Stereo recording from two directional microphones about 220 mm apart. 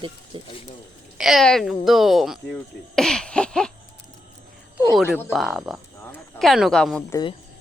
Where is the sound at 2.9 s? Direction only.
5° left (ahead or behind).